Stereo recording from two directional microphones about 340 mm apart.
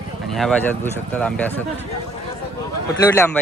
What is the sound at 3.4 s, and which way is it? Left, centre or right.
Speech, centre.